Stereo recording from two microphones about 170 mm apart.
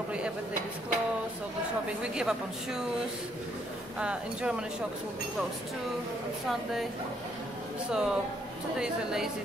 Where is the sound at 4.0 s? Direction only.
5° right (ahead or behind).